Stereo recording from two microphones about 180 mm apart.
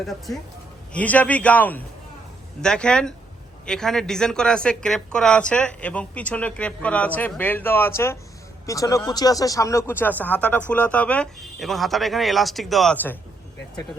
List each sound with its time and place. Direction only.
0.0 s speech: centre (ahead or behind)